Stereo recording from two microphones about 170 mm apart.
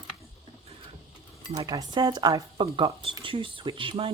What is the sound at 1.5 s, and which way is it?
Speech, 20° right (ahead or behind).